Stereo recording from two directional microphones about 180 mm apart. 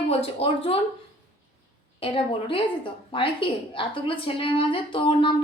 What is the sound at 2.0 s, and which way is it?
A woman's voice, 30° left (ahead or behind).